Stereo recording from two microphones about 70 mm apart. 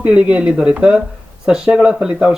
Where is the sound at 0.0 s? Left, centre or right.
Centre.